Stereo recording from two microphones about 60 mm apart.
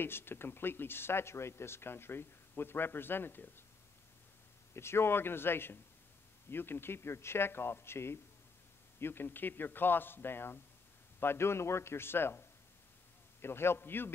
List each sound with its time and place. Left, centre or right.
0.0 s speech: left
4.7 s a man's voice: left